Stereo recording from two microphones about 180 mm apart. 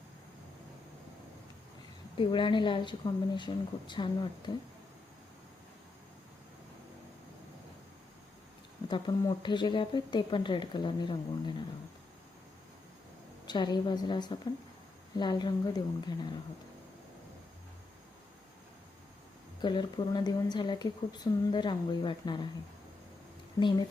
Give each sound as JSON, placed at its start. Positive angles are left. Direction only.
{"t": 2.1, "sound": "speech", "side_deg": 25}
{"t": 8.9, "sound": "speech", "side_deg": 25}
{"t": 13.5, "sound": "speech", "side_deg": 25}
{"t": 19.6, "sound": "speech", "side_deg": 25}
{"t": 23.6, "sound": "speech", "side_deg": 25}